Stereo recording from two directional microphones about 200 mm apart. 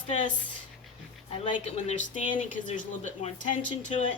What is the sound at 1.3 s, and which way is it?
Speech, 25° left (ahead or behind).